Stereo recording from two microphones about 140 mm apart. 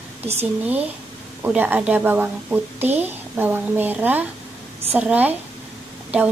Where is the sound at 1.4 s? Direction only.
15° right (ahead or behind).